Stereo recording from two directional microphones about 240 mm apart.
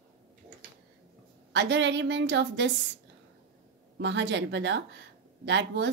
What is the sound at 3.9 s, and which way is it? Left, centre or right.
A woman's voice, right.